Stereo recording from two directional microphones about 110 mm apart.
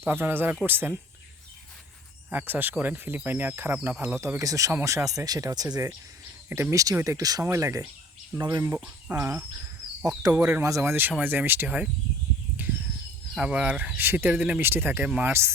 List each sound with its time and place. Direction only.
0.0 s speech: 20° right (ahead or behind)
2.3 s speech: 15° right (ahead or behind); by 5.9 s 35° right (ahead or behind)
6.5 s speech: 25° right (ahead or behind)
9.1 s speech: 20° right (ahead or behind)
12.6 s horse: 15° right (ahead or behind)
13.3 s speech: 10° right (ahead or behind)
15.3 s speech: 25° right (ahead or behind)